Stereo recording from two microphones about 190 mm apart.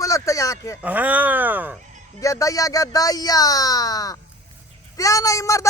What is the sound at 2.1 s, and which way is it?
A man's voice, 15° left (ahead or behind).